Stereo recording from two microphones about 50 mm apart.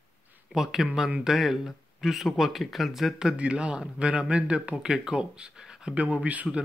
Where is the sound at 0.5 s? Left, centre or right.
Centre.